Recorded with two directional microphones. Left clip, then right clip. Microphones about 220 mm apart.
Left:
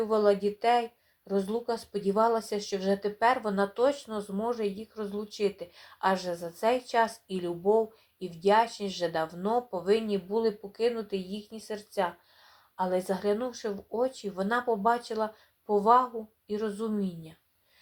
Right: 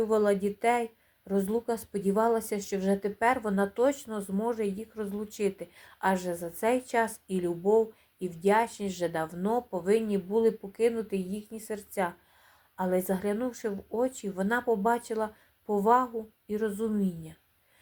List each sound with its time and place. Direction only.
0.0 s speech: 45° right (ahead or behind)